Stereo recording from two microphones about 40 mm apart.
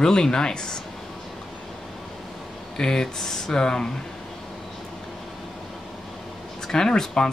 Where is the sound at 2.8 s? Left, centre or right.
Centre.